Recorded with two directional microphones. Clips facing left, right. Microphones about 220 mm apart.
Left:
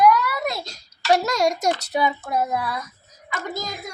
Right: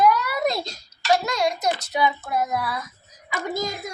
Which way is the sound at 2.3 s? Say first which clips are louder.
Left 1 dB; 30° left (ahead or behind).